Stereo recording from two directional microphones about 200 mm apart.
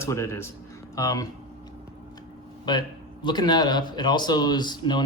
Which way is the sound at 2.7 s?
20° left (ahead or behind).